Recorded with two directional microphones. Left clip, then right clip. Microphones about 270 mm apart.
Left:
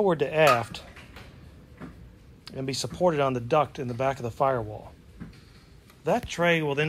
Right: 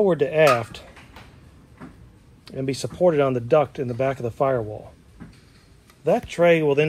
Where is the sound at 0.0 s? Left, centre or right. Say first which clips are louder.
Right 4 dB; centre.